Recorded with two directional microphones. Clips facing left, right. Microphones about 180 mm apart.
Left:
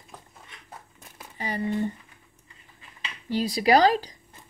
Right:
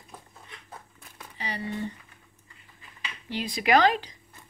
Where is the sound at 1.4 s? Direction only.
45° left (ahead or behind).